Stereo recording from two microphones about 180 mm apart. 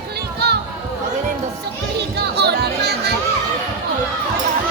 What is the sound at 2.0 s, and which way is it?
Music, 65° right (ahead or behind).